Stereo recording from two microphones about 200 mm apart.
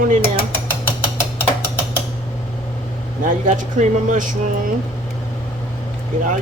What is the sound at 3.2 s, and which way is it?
A woman's voice, 40° right (ahead or behind).